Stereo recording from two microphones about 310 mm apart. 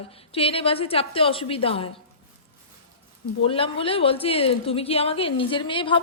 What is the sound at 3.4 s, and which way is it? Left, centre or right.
A woman's voice, centre.